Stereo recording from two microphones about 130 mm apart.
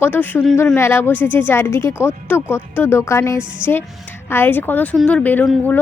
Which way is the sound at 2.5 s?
20° left (ahead or behind).